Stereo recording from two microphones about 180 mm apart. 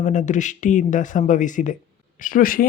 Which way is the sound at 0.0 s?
45° left (ahead or behind).